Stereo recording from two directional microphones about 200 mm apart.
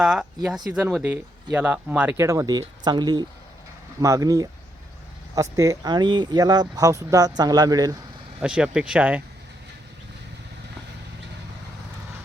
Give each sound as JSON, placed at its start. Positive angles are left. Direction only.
{"t": 0.0, "sound": "speech", "side_deg": -5}
{"t": 8.4, "sound": "speech", "side_deg": -5}